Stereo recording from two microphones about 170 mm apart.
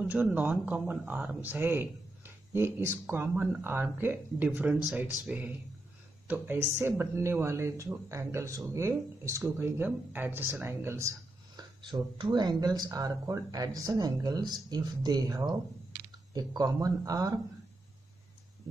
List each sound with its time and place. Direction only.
0.1 s speech: 10° right (ahead or behind)